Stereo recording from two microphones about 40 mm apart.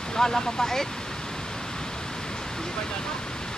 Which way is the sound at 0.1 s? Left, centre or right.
Centre.